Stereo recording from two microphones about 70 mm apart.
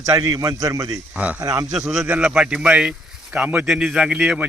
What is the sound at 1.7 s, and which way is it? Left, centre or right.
Speech, centre.